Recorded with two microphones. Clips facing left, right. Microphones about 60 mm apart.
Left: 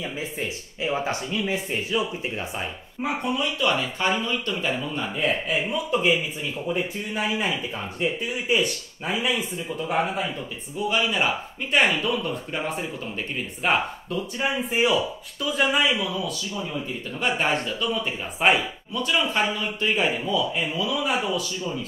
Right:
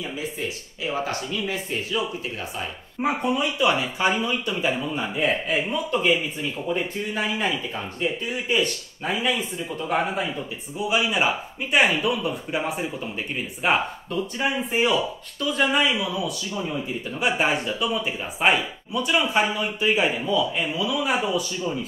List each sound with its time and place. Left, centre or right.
0.8 s speech: left
3.2 s speech: centre